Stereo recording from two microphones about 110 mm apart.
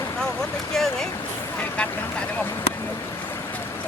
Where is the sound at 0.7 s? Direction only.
5° left (ahead or behind).